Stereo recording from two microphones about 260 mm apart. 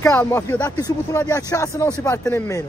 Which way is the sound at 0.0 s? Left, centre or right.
Centre.